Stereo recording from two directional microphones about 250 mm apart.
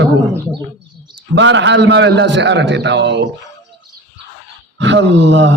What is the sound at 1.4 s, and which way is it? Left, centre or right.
A man's voice, right.